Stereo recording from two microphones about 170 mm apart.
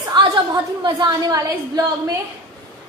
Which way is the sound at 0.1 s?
30° right (ahead or behind).